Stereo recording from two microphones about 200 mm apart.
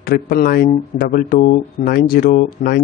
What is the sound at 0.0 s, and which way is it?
Speech, 50° left (ahead or behind).